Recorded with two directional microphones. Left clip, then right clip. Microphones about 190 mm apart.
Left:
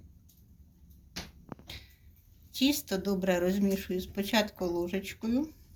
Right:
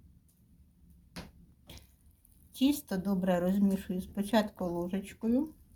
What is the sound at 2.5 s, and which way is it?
Speech, 40° right (ahead or behind).